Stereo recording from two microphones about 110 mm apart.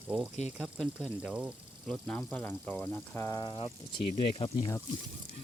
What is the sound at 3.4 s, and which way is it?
Speech, 50° left (ahead or behind).